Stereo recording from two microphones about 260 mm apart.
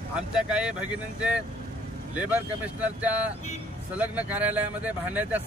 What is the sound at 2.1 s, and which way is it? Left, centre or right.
Speech, centre.